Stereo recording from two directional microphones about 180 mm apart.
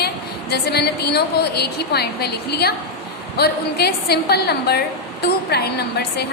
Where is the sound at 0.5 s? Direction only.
65° left (ahead or behind).